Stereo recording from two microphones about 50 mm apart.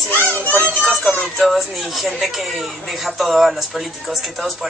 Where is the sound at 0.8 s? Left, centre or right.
Centre.